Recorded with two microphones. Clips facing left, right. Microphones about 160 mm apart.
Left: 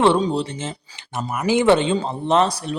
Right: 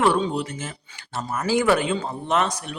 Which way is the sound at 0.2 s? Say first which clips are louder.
Left 3 dB; 30° left (ahead or behind).